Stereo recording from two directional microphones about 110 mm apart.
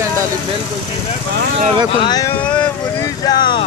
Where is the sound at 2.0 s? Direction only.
35° left (ahead or behind).